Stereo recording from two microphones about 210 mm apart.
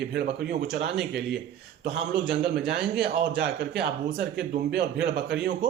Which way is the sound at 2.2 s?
50° right (ahead or behind).